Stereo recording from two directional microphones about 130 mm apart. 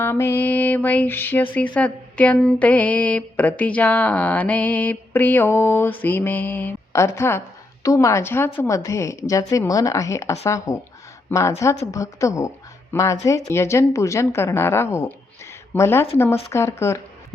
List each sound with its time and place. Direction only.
0.0 s speech: 20° left (ahead or behind)